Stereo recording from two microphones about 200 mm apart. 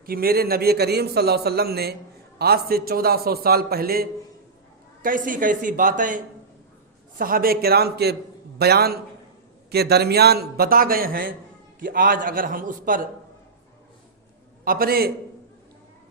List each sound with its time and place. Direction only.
0.0 s a man's voice: 50° right (ahead or behind)
7.2 s a man's voice: 45° right (ahead or behind)
14.6 s a man's voice: 45° right (ahead or behind)